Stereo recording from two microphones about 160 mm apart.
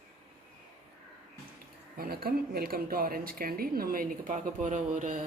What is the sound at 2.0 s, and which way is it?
Speech, 70° right (ahead or behind).